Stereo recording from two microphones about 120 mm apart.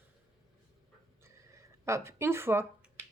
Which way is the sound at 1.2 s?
25° right (ahead or behind).